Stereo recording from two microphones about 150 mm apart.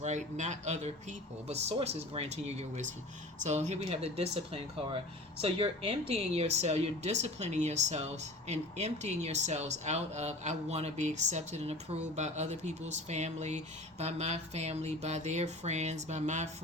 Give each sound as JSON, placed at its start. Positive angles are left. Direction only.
{"t": 0.0, "sound": "speech", "side_deg": -50}